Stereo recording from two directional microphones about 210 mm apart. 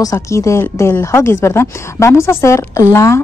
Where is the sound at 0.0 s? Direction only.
15° left (ahead or behind).